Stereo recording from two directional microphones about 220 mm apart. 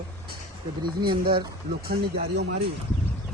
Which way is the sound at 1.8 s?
45° right (ahead or behind).